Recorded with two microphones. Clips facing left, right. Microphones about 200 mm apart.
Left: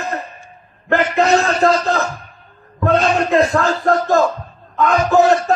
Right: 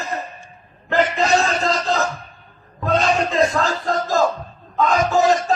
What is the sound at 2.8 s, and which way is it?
Speech, 60° left (ahead or behind).